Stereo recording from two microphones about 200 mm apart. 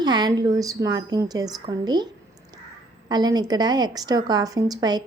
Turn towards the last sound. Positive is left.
turn(degrees=-20)  # may be behind; listen again after turning